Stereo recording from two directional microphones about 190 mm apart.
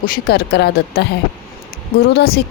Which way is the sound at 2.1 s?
55° left (ahead or behind).